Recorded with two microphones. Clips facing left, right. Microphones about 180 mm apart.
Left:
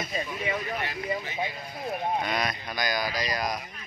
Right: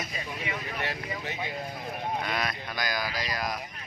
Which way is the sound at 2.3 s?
Centre (ahead or behind).